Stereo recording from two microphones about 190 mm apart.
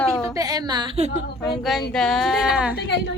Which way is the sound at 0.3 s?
20° right (ahead or behind).